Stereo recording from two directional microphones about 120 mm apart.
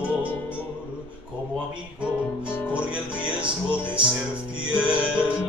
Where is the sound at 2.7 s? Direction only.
10° right (ahead or behind).